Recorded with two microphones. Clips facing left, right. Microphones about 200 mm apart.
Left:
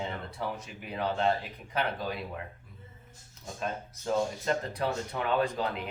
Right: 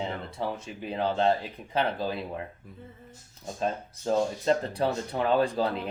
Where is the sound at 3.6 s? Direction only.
30° right (ahead or behind).